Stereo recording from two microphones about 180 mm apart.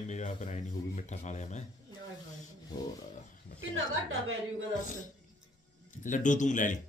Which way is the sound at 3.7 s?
90° right.